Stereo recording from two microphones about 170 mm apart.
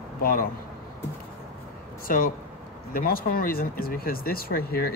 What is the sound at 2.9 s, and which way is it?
Speech, 60° left (ahead or behind).